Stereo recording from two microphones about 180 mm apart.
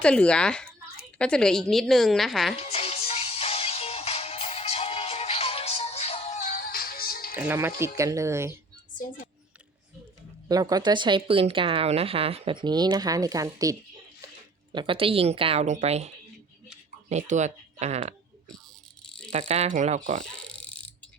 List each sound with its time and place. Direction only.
0.0 s a woman's voice: 5° left (ahead or behind)
2.6 s music: 35° left (ahead or behind); by 7.3 s 55° left (ahead or behind)
7.3 s speech: 10° right (ahead or behind)
9.0 s speech: 45° left (ahead or behind)
10.5 s a woman's voice: 20° right (ahead or behind); by 18.1 s 35° right (ahead or behind)
19.3 s a woman's voice: 35° right (ahead or behind)
20.2 s insect: 5° left (ahead or behind)